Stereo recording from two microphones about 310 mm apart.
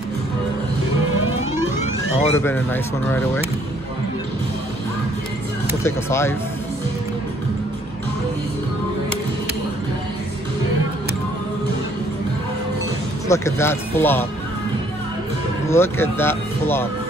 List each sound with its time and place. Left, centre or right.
1.8 s music: left
2.3 s speech: centre
5.9 s speech: centre
13.3 s speech: centre
15.7 s speech: centre